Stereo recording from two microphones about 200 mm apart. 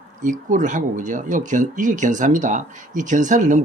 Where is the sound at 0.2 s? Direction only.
40° right (ahead or behind).